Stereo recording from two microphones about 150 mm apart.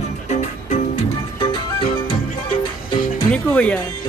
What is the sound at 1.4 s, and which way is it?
Music, 35° left (ahead or behind).